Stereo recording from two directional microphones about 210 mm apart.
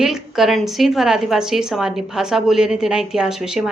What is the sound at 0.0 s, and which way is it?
A woman's voice, centre (ahead or behind).